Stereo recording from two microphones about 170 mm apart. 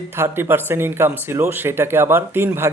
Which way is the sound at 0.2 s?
15° right (ahead or behind).